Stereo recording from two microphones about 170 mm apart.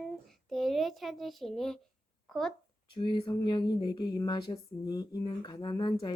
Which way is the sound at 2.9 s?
25° left (ahead or behind).